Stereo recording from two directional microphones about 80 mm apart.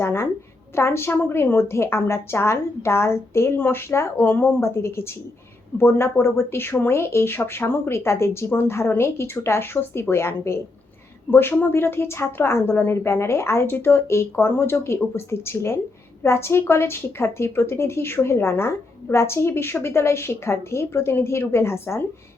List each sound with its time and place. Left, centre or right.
0.0 s a woman's voice: left